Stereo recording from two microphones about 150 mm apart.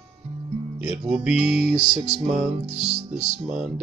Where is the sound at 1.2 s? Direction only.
5° right (ahead or behind).